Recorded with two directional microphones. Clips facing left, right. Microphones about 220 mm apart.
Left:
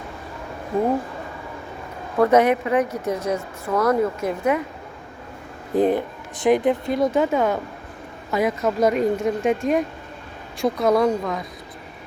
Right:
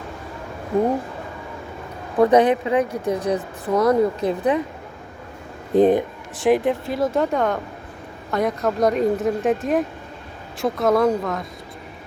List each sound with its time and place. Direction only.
2.1 s speech: 15° right (ahead or behind)
5.7 s speech: 20° right (ahead or behind)
6.3 s a woman's voice: centre (ahead or behind)